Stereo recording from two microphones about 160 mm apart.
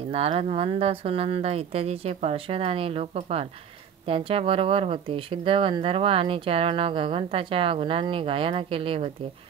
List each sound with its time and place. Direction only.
0.1 s speech: 40° right (ahead or behind)